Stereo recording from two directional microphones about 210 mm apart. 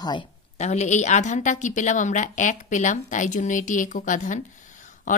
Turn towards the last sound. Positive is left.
turn(degrees=35)  # may be behind; listen again after turning